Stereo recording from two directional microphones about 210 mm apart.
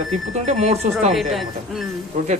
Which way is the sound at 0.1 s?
35° right (ahead or behind).